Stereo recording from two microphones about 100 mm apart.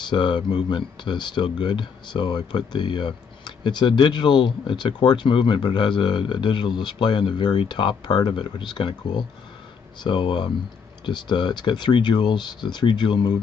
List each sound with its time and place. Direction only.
0.0 s speech: 50° left (ahead or behind)